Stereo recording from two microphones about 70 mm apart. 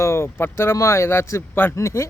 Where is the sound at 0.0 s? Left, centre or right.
Left.